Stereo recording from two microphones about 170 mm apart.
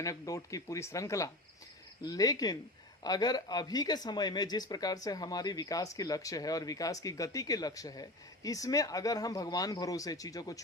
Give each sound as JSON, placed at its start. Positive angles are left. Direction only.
{"t": 0.0, "sound": "speech", "side_deg": 20}